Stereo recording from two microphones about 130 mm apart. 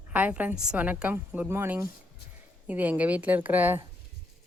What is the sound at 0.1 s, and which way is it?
A woman's voice, 10° right (ahead or behind).